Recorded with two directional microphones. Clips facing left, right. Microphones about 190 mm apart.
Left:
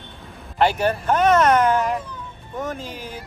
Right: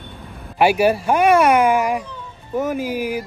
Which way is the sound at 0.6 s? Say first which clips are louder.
Right 4 dB; 10° right (ahead or behind).